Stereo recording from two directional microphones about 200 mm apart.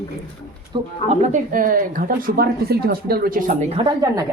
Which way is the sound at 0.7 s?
35° right (ahead or behind).